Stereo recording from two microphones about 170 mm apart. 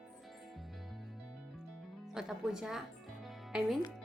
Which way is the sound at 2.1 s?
5° right (ahead or behind).